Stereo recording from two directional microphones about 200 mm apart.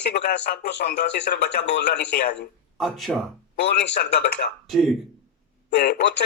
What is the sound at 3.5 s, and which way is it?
Speech, 60° left (ahead or behind).